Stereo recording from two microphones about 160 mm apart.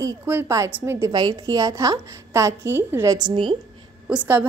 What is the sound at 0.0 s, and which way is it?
A woman's voice, 15° right (ahead or behind).